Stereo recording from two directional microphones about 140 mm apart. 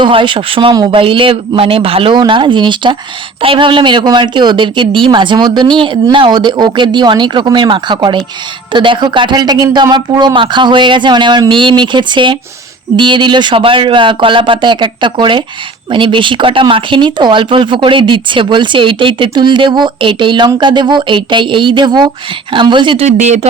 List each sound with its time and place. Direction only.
0.0 s speech: 35° right (ahead or behind)
23.0 s speech: 55° right (ahead or behind)